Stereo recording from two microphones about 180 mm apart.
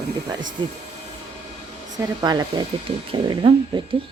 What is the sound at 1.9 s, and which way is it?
A woman's voice, 20° right (ahead or behind).